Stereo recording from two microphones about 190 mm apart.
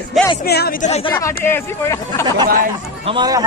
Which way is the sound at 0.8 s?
35° left (ahead or behind).